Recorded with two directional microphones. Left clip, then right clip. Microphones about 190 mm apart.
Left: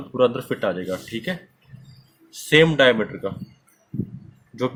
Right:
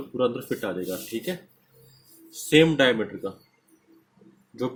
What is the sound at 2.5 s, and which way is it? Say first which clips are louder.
Speech: left 4 dB; 40° left (ahead or behind).